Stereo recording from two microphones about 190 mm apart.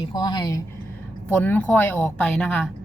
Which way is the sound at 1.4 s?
10° left (ahead or behind).